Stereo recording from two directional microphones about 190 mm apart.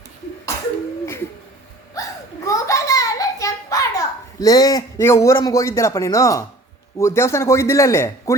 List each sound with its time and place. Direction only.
1.0 s bird: 10° left (ahead or behind)
2.0 s a sound: 15° left (ahead or behind)
7.0 s a man's voice: 15° left (ahead or behind)